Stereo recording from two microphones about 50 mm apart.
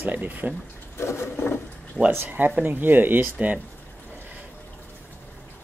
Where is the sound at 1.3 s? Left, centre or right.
Left.